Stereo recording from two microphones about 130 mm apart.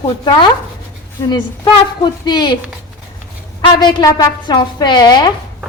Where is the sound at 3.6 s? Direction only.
35° left (ahead or behind).